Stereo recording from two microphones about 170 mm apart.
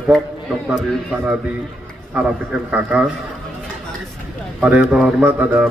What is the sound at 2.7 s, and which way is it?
Speech, 5° right (ahead or behind).